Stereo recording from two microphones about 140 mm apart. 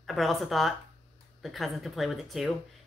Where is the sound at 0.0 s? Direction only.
Centre (ahead or behind).